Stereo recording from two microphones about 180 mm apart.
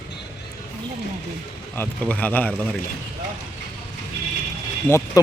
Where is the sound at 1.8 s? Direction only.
10° left (ahead or behind).